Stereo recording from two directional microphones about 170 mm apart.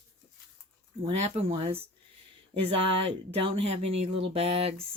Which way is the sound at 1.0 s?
35° right (ahead or behind).